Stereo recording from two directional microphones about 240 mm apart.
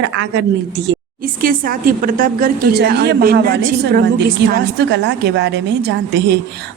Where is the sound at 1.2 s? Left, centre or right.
Right.